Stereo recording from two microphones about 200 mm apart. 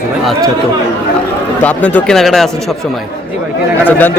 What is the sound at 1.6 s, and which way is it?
Speech, 5° left (ahead or behind).